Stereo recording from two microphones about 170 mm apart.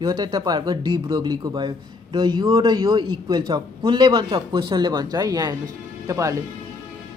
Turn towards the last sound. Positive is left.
turn(degrees=-20)  # may be behind; listen again after turning